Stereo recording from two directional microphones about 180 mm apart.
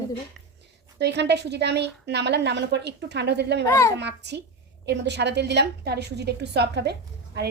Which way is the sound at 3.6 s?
15° left (ahead or behind).